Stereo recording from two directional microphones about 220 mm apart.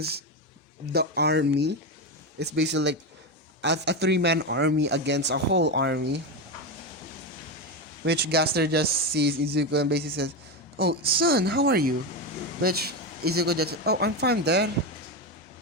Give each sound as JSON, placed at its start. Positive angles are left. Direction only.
{"t": 0.9, "sound": "a man's voice", "side_deg": -50}
{"t": 8.0, "sound": "a man's voice", "side_deg": -50}